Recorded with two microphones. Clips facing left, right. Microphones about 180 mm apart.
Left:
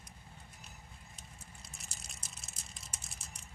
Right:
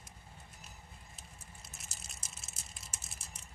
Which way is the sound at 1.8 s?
Centre (ahead or behind).